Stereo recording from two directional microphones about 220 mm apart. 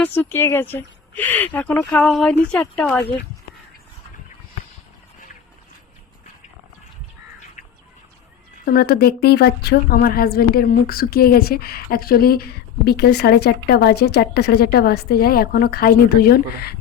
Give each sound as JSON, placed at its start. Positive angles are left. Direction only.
{"t": 0.0, "sound": "speech", "side_deg": 10}
{"t": 8.6, "sound": "a woman's voice", "side_deg": 45}